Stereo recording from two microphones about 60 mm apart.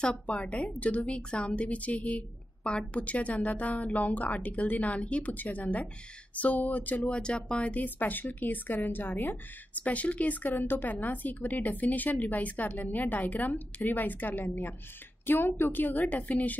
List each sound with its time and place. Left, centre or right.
0.0 s a woman's voice: centre